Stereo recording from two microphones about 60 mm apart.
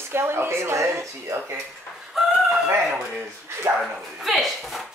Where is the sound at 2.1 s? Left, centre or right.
Centre.